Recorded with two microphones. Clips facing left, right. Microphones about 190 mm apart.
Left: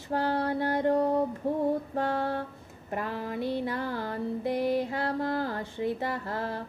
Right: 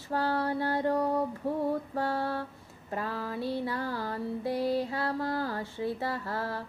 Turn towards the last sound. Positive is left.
turn(degrees=20)  # may be behind; listen again after turning